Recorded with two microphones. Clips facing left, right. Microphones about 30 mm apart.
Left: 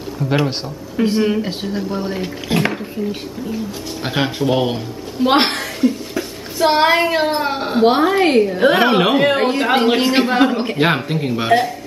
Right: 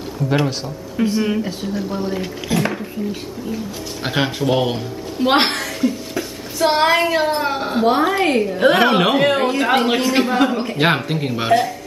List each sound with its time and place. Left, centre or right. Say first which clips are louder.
0.2 s speech: even; left
1.0 s a man's voice: left 2 dB; centre
1.4 s speech: left 1 dB; left
4.0 s a woman's voice: left 1 dB; centre
9.4 s a man's voice: left 1 dB; centre
9.9 s a man's voice: left 2 dB; centre
10.8 s a woman's voice: even; centre